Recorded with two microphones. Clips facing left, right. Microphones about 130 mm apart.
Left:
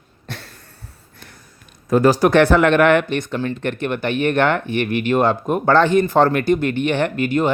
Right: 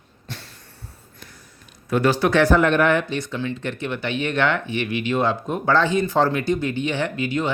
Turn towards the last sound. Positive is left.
turn(degrees=50)  # may be behind; listen again after turning